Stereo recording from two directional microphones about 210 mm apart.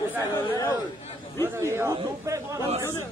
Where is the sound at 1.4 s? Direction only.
10° right (ahead or behind).